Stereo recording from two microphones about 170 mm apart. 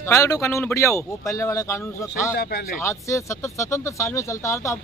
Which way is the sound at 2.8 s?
15° left (ahead or behind).